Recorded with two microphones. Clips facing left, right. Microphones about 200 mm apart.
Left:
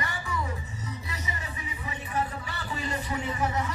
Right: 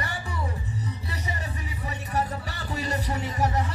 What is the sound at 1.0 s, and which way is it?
Music, 35° right (ahead or behind).